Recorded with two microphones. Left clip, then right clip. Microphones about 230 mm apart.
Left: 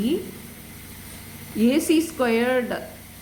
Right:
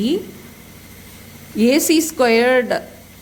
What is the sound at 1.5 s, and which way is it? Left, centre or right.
A woman's voice, right.